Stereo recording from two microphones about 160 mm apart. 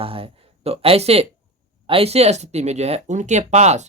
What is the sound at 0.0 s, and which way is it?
Speech, 35° right (ahead or behind).